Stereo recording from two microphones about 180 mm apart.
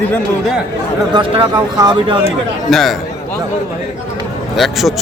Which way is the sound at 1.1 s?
25° right (ahead or behind).